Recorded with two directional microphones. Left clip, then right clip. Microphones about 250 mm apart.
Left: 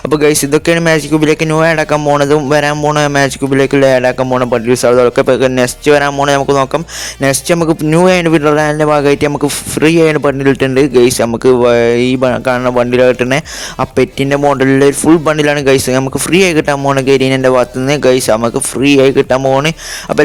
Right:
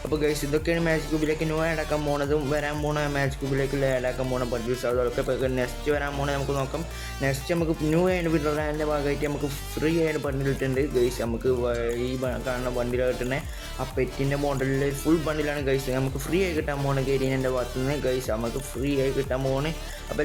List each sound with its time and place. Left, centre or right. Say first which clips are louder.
0.1 s a man's voice: left 16 dB; right